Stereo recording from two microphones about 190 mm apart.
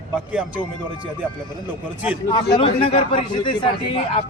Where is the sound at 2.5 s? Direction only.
30° left (ahead or behind).